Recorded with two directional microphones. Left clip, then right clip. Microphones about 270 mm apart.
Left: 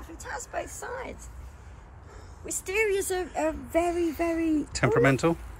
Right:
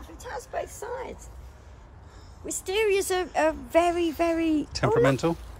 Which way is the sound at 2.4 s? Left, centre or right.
Right.